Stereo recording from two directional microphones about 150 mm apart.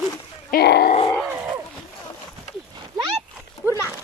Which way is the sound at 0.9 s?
40° left (ahead or behind).